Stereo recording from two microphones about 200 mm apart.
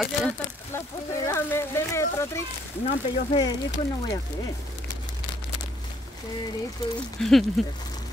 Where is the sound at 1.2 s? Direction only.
15° left (ahead or behind).